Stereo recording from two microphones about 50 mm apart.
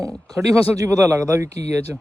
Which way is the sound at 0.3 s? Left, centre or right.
Right.